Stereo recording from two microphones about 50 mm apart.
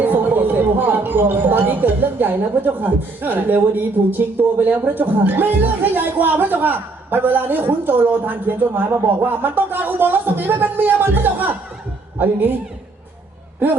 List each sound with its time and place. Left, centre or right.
0.0 s a man's voice: right
13.6 s a man's voice: right